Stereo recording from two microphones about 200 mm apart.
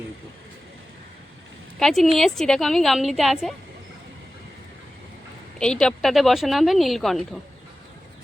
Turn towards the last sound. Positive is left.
turn(degrees=0)  # may be behind; listen again after turning